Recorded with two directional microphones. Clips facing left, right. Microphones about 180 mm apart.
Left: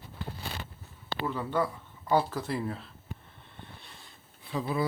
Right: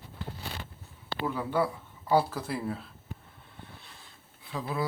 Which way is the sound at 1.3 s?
10° right (ahead or behind).